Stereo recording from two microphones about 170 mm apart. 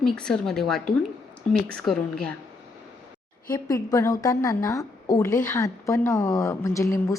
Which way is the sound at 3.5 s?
20° left (ahead or behind).